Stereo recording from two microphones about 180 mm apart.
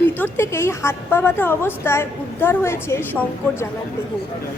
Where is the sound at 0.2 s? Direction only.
15° left (ahead or behind).